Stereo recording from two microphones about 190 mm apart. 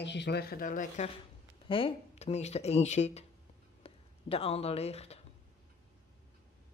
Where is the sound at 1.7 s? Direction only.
30° left (ahead or behind).